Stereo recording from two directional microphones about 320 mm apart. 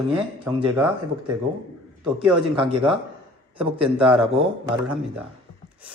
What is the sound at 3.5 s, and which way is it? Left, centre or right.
Speech, centre.